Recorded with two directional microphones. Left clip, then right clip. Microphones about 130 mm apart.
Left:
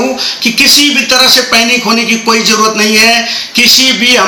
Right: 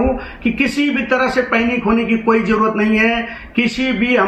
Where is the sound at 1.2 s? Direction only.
25° left (ahead or behind).